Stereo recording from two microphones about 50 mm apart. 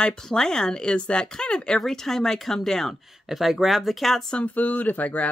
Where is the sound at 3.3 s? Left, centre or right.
Centre.